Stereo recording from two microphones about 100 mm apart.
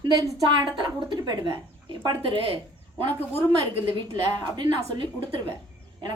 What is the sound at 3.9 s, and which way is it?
A woman's voice, 50° right (ahead or behind).